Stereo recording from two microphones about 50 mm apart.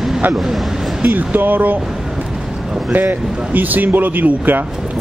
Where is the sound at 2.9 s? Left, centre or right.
Right.